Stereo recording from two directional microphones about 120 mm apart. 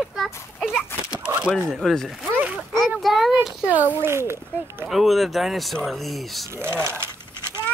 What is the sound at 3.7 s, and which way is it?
A child's voice, 20° right (ahead or behind).